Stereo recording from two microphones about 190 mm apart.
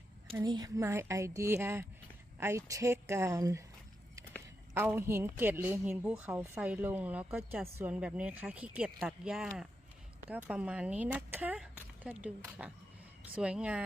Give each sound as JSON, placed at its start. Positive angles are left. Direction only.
{"t": 0.3, "sound": "a woman's voice", "side_deg": -20}
{"t": 4.7, "sound": "a woman's voice", "side_deg": -10}